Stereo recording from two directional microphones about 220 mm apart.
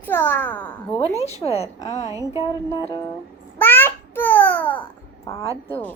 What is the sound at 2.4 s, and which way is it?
Speech, 15° left (ahead or behind).